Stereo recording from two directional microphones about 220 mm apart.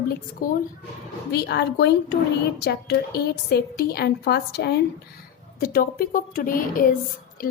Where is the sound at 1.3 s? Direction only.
50° left (ahead or behind).